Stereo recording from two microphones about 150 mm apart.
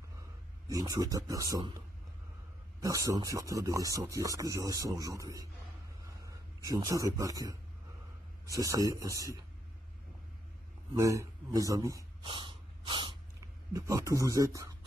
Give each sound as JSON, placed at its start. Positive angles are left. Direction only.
{"t": 0.7, "sound": "speech", "side_deg": -25}
{"t": 2.8, "sound": "a man's voice", "side_deg": -20}
{"t": 11.0, "sound": "speech", "side_deg": -20}
{"t": 12.2, "sound": "snort", "side_deg": -35}
{"t": 13.7, "sound": "speech", "side_deg": -20}